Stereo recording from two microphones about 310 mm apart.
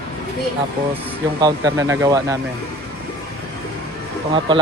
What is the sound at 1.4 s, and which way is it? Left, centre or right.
Speech, centre.